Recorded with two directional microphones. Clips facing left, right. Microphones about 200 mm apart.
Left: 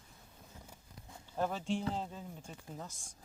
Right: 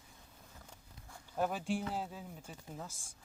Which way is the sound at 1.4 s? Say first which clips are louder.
Even; 10° right (ahead or behind).